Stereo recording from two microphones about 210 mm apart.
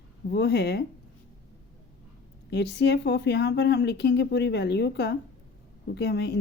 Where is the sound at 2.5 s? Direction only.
50° left (ahead or behind).